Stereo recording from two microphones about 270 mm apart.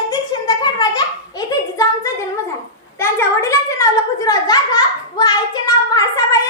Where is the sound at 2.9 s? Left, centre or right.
Centre.